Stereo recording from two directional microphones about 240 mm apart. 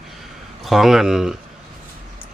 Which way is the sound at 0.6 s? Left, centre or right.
Centre.